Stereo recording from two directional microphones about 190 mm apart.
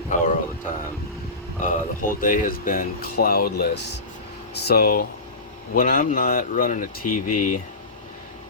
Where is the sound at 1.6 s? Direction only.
45° left (ahead or behind).